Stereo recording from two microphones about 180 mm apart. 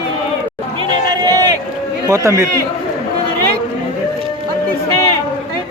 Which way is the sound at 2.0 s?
15° right (ahead or behind).